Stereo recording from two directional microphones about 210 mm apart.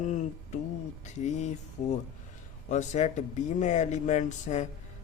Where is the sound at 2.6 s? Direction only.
35° left (ahead or behind).